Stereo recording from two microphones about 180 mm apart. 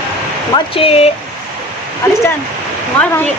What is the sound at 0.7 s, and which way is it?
Speech, 30° left (ahead or behind).